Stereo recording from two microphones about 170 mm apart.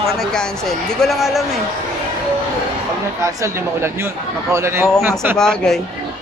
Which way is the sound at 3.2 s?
15° right (ahead or behind).